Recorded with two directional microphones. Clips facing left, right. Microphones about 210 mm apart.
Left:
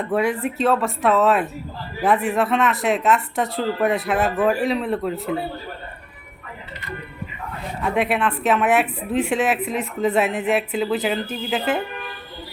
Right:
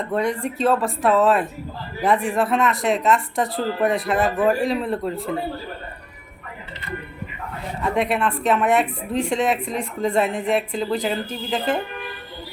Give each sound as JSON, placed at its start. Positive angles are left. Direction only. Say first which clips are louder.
{"t": 0.0, "sound": "speech", "louder": "left 2 dB", "side_deg": 5}
{"t": 7.8, "sound": "speech", "louder": "even", "side_deg": 0}